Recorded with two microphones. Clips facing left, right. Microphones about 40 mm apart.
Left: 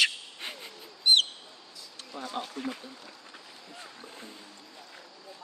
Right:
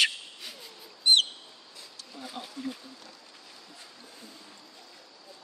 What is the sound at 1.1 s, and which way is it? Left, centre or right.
Bird, centre.